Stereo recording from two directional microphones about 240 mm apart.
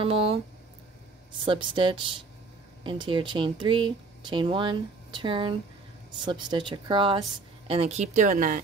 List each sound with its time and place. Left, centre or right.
0.0 s speech: right
1.4 s speech: right